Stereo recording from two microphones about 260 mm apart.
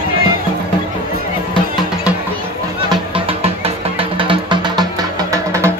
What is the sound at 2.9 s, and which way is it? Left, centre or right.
Music, right.